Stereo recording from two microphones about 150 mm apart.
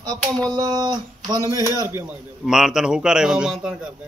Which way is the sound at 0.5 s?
25° right (ahead or behind).